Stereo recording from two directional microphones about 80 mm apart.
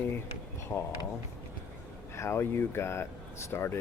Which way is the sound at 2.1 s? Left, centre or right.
Left.